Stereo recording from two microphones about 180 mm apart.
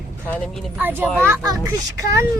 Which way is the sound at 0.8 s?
10° right (ahead or behind).